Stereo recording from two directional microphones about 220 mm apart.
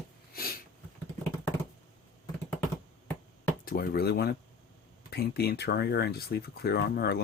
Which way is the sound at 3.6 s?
40° left (ahead or behind).